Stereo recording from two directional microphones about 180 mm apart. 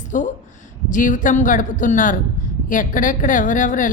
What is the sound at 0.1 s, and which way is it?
A woman's voice, 45° left (ahead or behind).